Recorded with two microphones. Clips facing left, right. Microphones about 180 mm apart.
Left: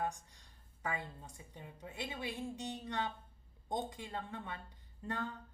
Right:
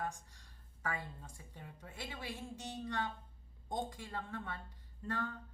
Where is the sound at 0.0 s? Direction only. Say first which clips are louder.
Left 3 dB; 20° left (ahead or behind).